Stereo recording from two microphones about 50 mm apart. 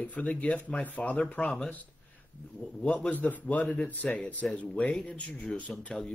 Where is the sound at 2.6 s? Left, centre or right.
Left.